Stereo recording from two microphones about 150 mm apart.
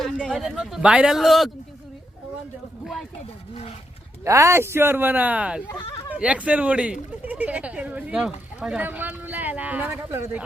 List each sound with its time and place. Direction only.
0.3 s speech: 5° right (ahead or behind)
2.8 s speech: centre (ahead or behind)
3.5 s speech: 40° left (ahead or behind)
4.2 s speech: 20° right (ahead or behind)